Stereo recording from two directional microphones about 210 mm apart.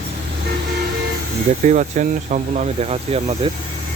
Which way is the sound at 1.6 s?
40° right (ahead or behind).